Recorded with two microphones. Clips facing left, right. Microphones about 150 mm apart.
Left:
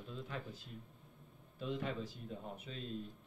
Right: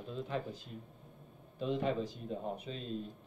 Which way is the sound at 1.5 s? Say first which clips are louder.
Right 7 dB; 25° right (ahead or behind).